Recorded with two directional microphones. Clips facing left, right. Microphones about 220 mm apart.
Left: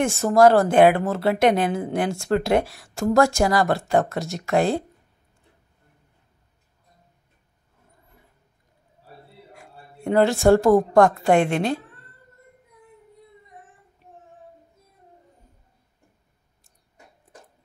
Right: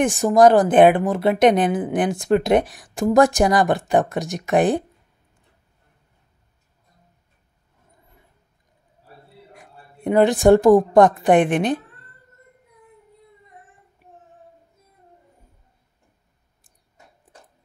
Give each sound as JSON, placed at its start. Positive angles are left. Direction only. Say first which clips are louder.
{"t": 0.0, "sound": "speech", "louder": "right 2 dB", "side_deg": -15}
{"t": 9.5, "sound": "a sound", "louder": "even", "side_deg": -20}
{"t": 11.0, "sound": "speech", "louder": "right 2 dB", "side_deg": -20}